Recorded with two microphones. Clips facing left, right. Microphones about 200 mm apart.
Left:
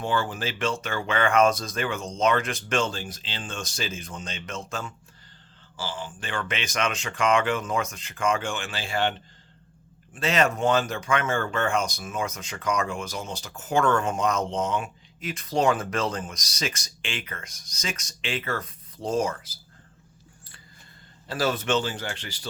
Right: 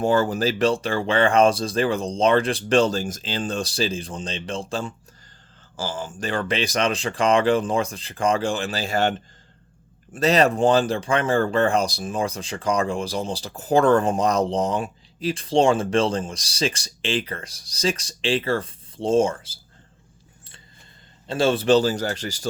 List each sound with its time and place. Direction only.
0.0 s speech: 40° right (ahead or behind)
5.7 s speech: 45° right (ahead or behind); by 19.5 s 30° right (ahead or behind)
21.2 s speech: 25° right (ahead or behind); by 22.4 s 40° right (ahead or behind)